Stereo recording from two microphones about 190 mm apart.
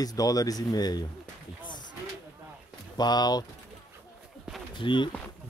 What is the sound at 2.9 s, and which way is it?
Speech, 20° left (ahead or behind).